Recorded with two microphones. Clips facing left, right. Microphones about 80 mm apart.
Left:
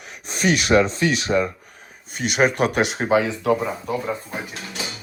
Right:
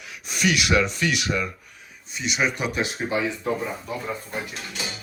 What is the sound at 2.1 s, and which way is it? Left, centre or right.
Speech, left.